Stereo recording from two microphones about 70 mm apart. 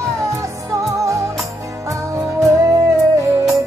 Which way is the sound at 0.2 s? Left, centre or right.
Right.